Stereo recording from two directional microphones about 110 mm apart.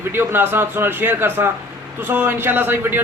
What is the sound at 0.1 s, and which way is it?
A man's voice, 20° right (ahead or behind).